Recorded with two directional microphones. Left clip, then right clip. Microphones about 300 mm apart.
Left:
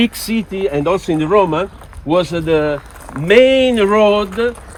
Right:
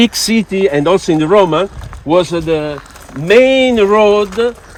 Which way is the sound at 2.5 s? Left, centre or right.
Centre.